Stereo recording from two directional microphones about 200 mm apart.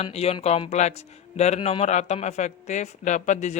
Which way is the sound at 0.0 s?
30° left (ahead or behind).